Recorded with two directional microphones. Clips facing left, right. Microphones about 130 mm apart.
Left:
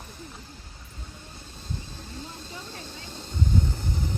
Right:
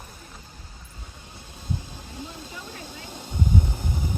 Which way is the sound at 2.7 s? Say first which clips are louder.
Right 2 dB; 10° right (ahead or behind).